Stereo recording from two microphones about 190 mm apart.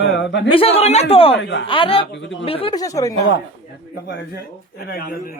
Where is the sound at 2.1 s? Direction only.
70° left (ahead or behind).